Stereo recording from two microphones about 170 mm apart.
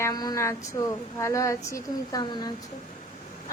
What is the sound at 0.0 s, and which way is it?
Speech, 20° left (ahead or behind).